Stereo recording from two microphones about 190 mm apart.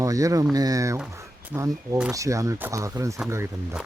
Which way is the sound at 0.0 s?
15° right (ahead or behind).